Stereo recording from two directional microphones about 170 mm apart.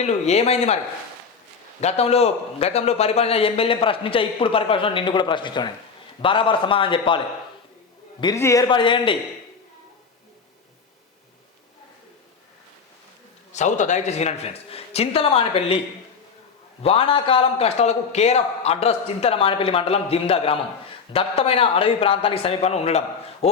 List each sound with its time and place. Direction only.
0.0 s a man's voice: 40° left (ahead or behind)
1.8 s a man's voice: 40° left (ahead or behind)
8.2 s a man's voice: 20° left (ahead or behind)
13.5 s a man's voice: 45° left (ahead or behind)
16.8 s a man's voice: 30° left (ahead or behind)